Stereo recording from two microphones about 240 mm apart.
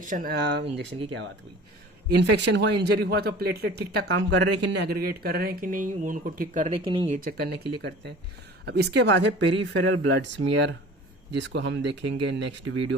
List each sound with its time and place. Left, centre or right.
0.0 s speech: right
6.8 s speech: right
7.2 s speech: right